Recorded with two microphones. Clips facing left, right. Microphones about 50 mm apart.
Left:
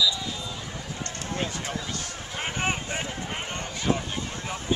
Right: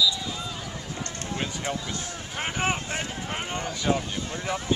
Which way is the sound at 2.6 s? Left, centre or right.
Centre.